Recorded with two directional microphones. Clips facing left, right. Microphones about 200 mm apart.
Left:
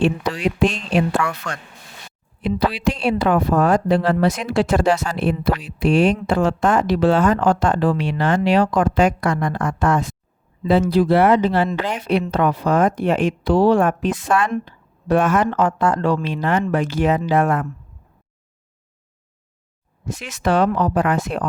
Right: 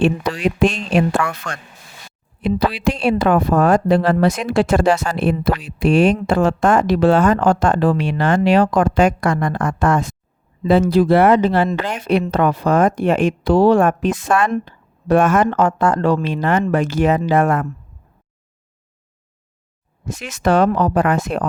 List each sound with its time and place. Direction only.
0.9 s speech: 50° right (ahead or behind)
20.1 s speech: 45° right (ahead or behind)